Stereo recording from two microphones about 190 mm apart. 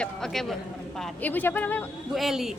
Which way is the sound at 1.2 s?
10° left (ahead or behind).